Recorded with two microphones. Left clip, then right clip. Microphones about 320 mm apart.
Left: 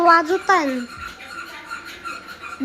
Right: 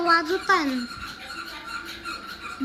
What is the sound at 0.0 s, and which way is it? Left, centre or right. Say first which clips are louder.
Speech: left 7 dB; left.